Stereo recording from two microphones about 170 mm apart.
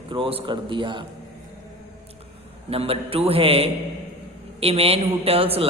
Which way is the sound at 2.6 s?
35° right (ahead or behind).